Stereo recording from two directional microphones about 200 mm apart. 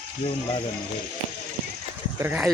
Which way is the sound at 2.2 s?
10° right (ahead or behind).